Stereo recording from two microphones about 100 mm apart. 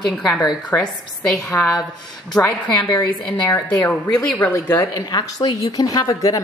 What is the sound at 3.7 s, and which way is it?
Speech, 10° left (ahead or behind).